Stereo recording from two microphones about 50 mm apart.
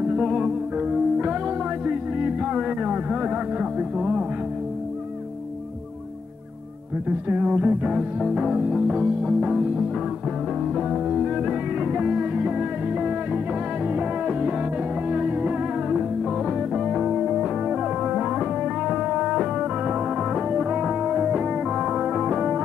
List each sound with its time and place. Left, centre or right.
0.1 s music: centre
7.1 s speech: right; by 8.8 s centre
8.8 s speech: right
10.8 s music: centre
11.4 s music: right
16.4 s music: centre